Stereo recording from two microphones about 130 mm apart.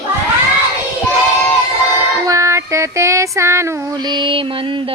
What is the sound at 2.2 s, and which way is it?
Child singing, 25° right (ahead or behind).